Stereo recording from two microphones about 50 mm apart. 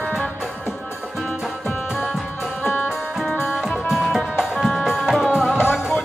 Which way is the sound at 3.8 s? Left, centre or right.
Centre.